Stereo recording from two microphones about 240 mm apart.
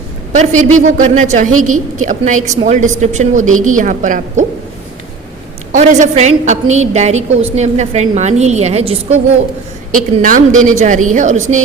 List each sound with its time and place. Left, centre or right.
0.3 s a woman's voice: right
5.7 s a woman's voice: right